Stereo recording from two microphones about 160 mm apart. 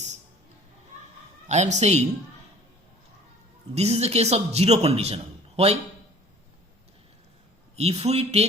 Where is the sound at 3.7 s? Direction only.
40° right (ahead or behind).